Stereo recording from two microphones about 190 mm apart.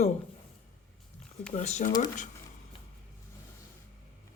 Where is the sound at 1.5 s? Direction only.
35° left (ahead or behind).